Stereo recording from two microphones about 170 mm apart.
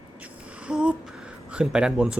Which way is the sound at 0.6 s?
5° right (ahead or behind).